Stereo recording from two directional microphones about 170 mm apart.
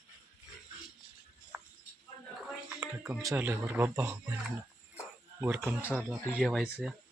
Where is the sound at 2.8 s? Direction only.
5° right (ahead or behind).